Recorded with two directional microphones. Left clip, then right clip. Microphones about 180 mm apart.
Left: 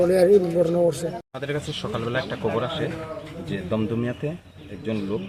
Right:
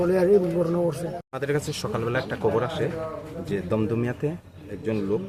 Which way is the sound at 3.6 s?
15° right (ahead or behind).